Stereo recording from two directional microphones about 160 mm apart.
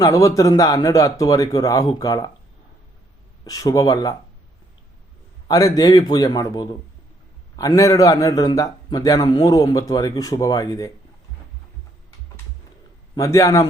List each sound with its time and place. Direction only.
0.0 s a man's voice: 20° left (ahead or behind)
3.4 s a man's voice: 20° left (ahead or behind)
5.5 s a man's voice: 20° left (ahead or behind)
13.1 s a man's voice: 20° left (ahead or behind)